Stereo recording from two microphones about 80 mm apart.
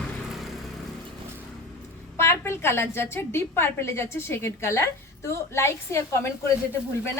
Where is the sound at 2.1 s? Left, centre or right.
Left.